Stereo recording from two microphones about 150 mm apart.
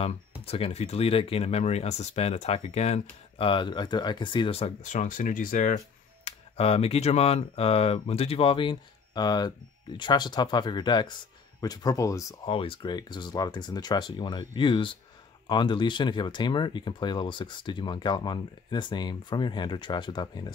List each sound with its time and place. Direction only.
0.5 s speech: 40° left (ahead or behind)
3.3 s speech: 35° left (ahead or behind)
4.9 s speech: 60° left (ahead or behind)
6.2 s speech: 40° left (ahead or behind); by 12.4 s 20° left (ahead or behind)
12.4 s speech: 35° left (ahead or behind)